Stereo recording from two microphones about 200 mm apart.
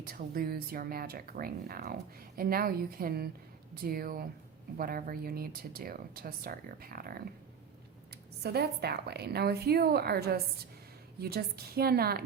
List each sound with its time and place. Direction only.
0.1 s speech: 50° right (ahead or behind)
8.4 s speech: 55° right (ahead or behind)